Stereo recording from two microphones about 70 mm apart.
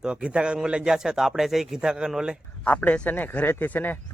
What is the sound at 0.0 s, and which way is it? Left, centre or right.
A man's voice, centre.